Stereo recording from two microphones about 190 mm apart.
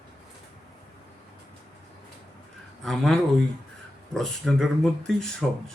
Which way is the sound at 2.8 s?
Centre (ahead or behind).